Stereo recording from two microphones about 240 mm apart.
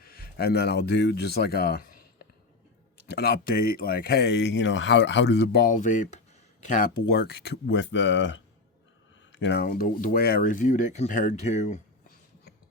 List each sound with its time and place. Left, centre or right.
0.0 s speech: left
3.1 s speech: left